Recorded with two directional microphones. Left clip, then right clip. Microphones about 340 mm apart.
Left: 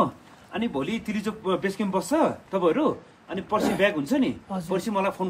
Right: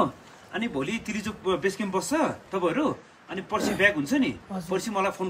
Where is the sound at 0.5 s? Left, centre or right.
Centre.